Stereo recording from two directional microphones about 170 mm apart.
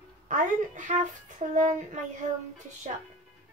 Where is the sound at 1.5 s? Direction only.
45° right (ahead or behind).